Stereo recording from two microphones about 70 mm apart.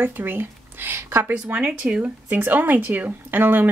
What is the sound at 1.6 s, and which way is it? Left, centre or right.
Speech, centre.